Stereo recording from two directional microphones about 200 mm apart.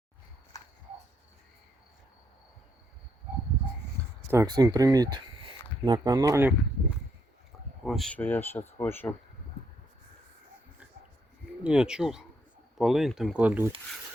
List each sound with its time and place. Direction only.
4.3 s speech: 20° right (ahead or behind)
7.9 s speech: 5° left (ahead or behind)
11.6 s speech: 5° right (ahead or behind)